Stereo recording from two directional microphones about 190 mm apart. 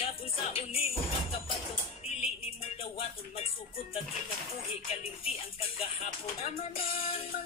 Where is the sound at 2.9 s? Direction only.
35° left (ahead or behind).